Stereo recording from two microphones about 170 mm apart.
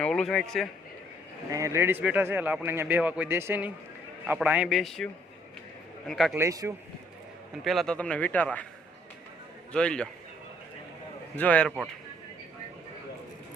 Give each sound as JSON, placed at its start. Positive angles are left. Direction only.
{"t": 0.0, "sound": "a man's voice", "side_deg": 0}
{"t": 1.5, "sound": "a man's voice", "side_deg": -20}
{"t": 6.1, "sound": "a man's voice", "side_deg": 0}
{"t": 6.3, "sound": "a man's voice", "side_deg": -20}
{"t": 7.6, "sound": "speech", "side_deg": 0}
{"t": 9.7, "sound": "a man's voice", "side_deg": 5}
{"t": 11.3, "sound": "speech", "side_deg": 10}